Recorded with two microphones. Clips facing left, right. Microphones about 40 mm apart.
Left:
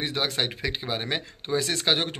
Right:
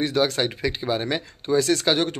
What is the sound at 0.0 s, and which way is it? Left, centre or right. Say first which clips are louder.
Speech: right 6 dB; centre.